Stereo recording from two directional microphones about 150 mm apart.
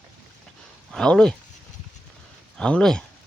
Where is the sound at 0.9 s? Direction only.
5° left (ahead or behind).